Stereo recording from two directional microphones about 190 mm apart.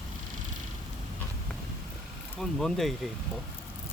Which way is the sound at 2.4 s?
Centre (ahead or behind).